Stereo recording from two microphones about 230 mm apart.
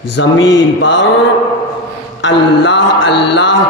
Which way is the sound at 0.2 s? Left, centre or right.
Left.